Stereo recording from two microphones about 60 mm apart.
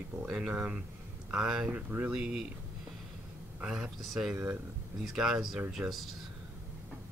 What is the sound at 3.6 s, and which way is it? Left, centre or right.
Speech, centre.